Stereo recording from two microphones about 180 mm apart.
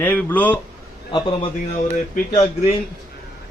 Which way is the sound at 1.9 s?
50° left (ahead or behind).